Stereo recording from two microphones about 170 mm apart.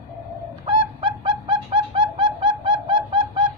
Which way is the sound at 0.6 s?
25° right (ahead or behind).